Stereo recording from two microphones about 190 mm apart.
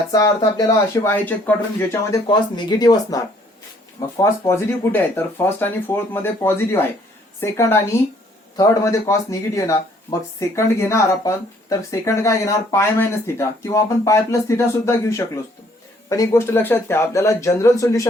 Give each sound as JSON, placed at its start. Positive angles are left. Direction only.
{"t": 0.1, "sound": "speech", "side_deg": 20}